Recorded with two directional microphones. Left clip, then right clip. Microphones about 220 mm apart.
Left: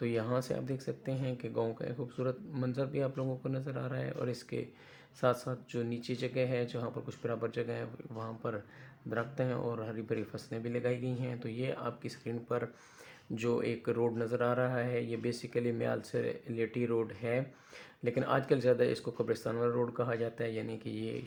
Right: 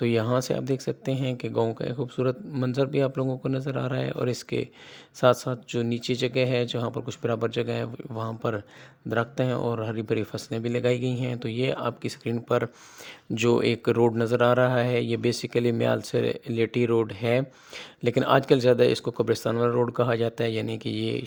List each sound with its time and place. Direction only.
0.0 s speech: 45° right (ahead or behind)